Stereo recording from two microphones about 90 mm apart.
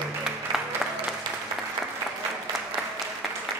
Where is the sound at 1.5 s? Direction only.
15° right (ahead or behind).